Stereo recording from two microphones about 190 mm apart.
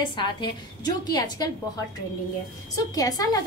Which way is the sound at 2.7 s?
20° left (ahead or behind).